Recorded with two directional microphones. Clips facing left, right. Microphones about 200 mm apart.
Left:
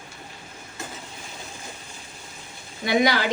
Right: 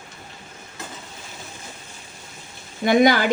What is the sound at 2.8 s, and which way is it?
Speech, 50° right (ahead or behind).